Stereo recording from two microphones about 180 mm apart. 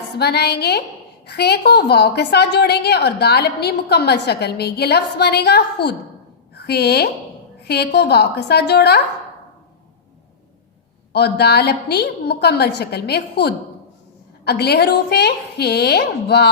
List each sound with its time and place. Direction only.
0.2 s a woman's voice: 65° left (ahead or behind)
11.1 s a woman's voice: 65° left (ahead or behind)